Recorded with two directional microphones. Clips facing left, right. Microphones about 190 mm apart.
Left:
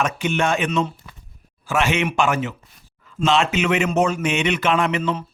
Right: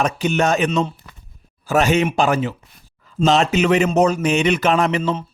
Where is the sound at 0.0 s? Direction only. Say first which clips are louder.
Right 3 dB; 40° right (ahead or behind).